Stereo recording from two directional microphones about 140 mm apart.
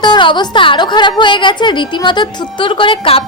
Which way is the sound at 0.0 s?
35° left (ahead or behind).